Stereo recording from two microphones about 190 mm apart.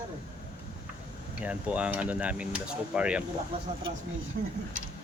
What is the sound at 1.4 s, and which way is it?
Speech, 5° right (ahead or behind).